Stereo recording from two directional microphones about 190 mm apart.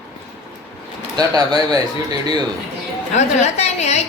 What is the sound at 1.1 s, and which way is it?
Speech, 20° right (ahead or behind).